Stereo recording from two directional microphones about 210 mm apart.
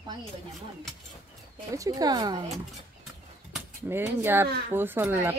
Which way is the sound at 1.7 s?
15° right (ahead or behind).